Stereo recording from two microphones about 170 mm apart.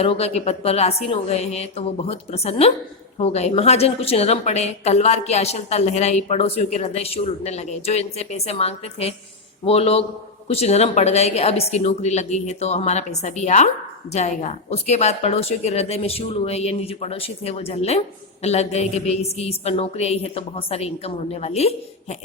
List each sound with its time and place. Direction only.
0.0 s a woman's voice: 35° left (ahead or behind)